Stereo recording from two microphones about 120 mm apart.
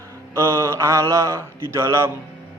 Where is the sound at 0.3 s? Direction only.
25° right (ahead or behind).